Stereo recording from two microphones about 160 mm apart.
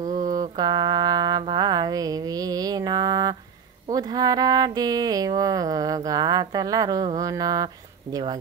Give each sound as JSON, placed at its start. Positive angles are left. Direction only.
{"t": 0.3, "sound": "music", "side_deg": -25}
{"t": 1.4, "sound": "mantra", "side_deg": -25}
{"t": 3.9, "sound": "a sound", "side_deg": -25}